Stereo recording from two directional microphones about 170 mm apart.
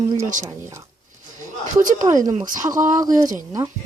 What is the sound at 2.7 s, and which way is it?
Speech, 50° right (ahead or behind).